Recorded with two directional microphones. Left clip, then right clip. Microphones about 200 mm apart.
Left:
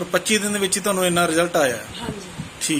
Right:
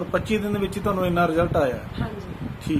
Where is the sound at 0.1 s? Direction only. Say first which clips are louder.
Left 5 dB; 5° right (ahead or behind).